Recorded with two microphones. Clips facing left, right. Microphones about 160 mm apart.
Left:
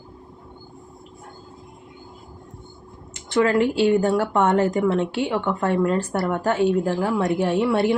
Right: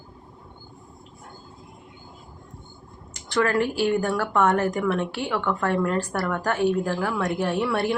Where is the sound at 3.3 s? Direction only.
20° left (ahead or behind).